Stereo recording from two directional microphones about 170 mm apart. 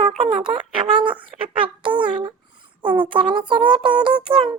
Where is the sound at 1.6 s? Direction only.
30° right (ahead or behind).